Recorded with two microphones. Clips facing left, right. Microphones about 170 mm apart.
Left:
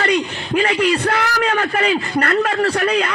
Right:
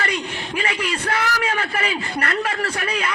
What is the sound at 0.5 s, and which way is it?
A man's voice, 40° left (ahead or behind).